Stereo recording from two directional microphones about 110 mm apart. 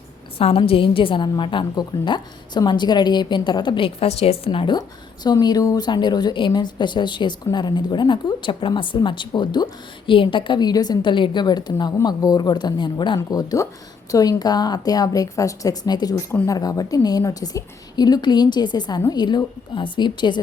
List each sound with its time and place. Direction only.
0.3 s a woman's voice: 60° left (ahead or behind)
4.8 s a woman's voice: 40° left (ahead or behind)
13.1 s a woman's voice: 30° left (ahead or behind)